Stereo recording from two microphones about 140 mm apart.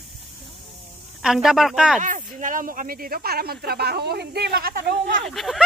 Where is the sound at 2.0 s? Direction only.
70° right (ahead or behind); by 4.8 s 90° right.